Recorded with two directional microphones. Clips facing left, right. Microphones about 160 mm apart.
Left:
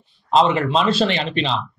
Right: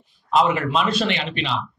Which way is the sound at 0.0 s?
30° left (ahead or behind).